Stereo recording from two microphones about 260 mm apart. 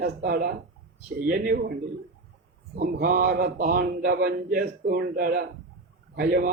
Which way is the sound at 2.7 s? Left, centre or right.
Right.